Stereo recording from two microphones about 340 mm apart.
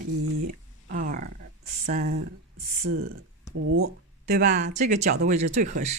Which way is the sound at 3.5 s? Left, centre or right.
Right.